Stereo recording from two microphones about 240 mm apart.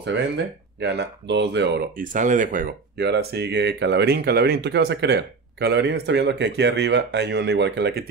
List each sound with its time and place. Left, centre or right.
0.7 s speech: right